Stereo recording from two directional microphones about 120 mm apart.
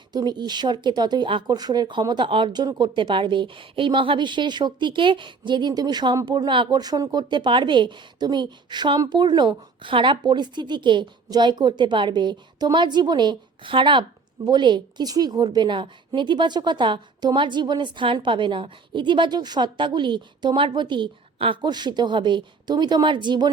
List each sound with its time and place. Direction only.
0.1 s speech: 35° right (ahead or behind)